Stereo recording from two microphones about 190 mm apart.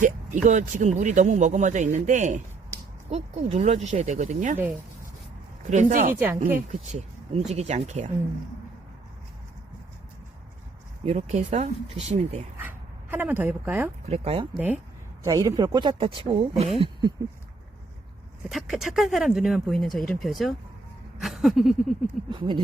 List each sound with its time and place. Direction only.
0.4 s speech: 40° right (ahead or behind)
5.7 s speech: 40° right (ahead or behind)
6.1 s speech: 10° right (ahead or behind)
6.7 s speech: 35° right (ahead or behind)
11.0 s speech: 35° right (ahead or behind)
12.5 s speech: 10° right (ahead or behind)
14.1 s speech: 30° right (ahead or behind)
15.2 s speech: 15° right (ahead or behind)
18.4 s speech: centre (ahead or behind)
22.3 s speech: 25° right (ahead or behind)